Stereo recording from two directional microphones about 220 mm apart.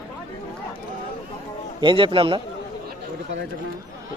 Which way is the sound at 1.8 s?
25° right (ahead or behind).